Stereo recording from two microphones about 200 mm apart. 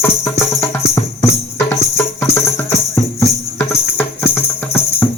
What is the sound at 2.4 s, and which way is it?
Music, 15° left (ahead or behind).